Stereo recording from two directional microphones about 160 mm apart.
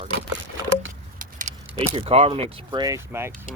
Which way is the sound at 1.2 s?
55° right (ahead or behind).